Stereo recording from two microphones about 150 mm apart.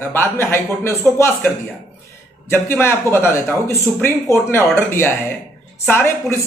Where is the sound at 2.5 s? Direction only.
15° left (ahead or behind).